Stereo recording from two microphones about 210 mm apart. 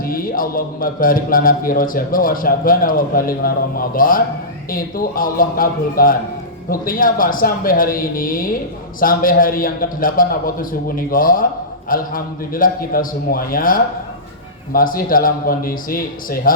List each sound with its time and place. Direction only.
0.0 s a man's voice: 45° left (ahead or behind)